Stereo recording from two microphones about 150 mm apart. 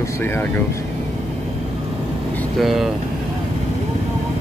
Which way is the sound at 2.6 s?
Centre (ahead or behind).